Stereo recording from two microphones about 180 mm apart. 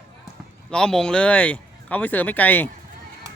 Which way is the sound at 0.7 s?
5° left (ahead or behind).